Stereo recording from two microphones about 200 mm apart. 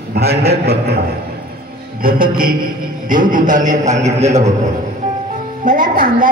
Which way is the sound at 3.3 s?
40° right (ahead or behind).